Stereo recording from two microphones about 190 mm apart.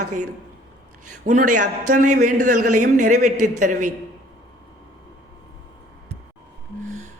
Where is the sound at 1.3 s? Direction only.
40° right (ahead or behind).